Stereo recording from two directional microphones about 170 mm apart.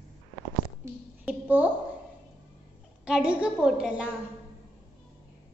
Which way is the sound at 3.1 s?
5° right (ahead or behind).